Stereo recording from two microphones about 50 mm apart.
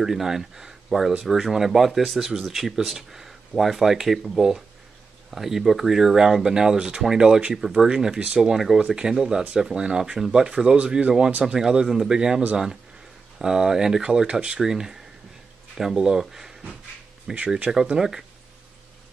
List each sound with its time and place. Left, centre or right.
0.0 s speech: centre
14.2 s speech: right
14.6 s speech: centre